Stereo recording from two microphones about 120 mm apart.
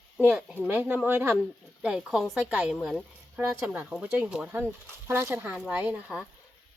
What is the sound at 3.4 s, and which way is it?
A woman's voice, 10° right (ahead or behind).